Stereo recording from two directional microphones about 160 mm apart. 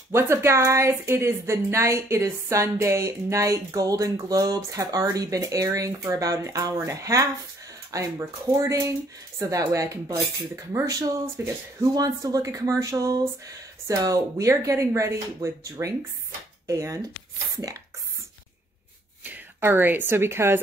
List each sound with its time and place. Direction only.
0.1 s speech: 15° right (ahead or behind)
19.2 s speech: 10° right (ahead or behind)